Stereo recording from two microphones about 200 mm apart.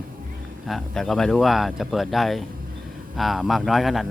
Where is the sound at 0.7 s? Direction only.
Centre (ahead or behind).